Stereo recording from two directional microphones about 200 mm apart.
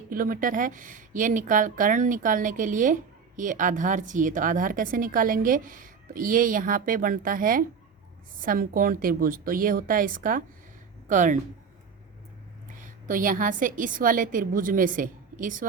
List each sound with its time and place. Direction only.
0.1 s speech: 45° right (ahead or behind)
12.6 s a woman's voice: 40° right (ahead or behind)